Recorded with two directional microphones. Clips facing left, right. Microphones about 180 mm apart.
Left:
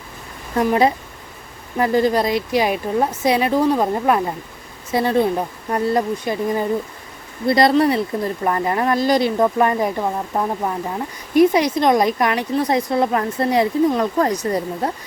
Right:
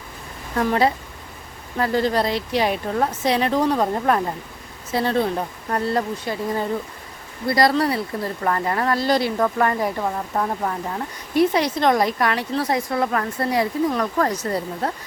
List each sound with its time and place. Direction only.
0.5 s speech: 15° left (ahead or behind)